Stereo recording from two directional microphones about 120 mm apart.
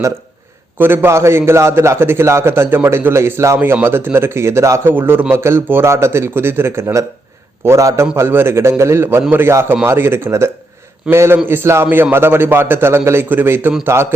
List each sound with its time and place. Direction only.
0.8 s a man's voice: 20° right (ahead or behind)